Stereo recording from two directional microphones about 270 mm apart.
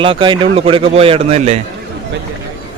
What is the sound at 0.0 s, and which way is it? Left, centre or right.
A man's voice, centre.